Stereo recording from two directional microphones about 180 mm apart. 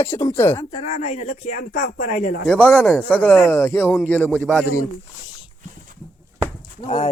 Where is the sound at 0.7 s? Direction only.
35° left (ahead or behind).